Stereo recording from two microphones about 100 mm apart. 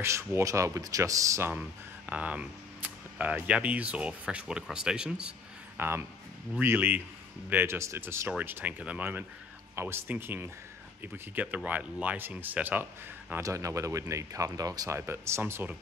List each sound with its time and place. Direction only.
0.0 s speech: 25° right (ahead or behind)
2.0 s speech: 15° right (ahead or behind)
5.8 s speech: 25° right (ahead or behind)
13.4 s speech: 30° right (ahead or behind)